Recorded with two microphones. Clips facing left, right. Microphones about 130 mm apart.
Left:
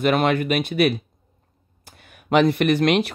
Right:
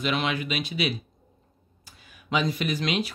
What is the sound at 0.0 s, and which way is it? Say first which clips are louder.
Speech: left 8 dB; 50° left (ahead or behind).